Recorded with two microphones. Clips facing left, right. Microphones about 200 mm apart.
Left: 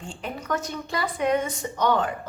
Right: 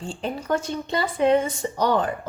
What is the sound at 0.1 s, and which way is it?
A woman's voice, 30° right (ahead or behind).